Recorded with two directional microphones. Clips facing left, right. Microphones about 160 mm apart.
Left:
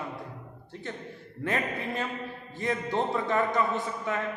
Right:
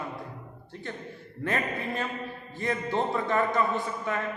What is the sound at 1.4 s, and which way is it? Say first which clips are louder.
A man's voice: even; 20° left (ahead or behind).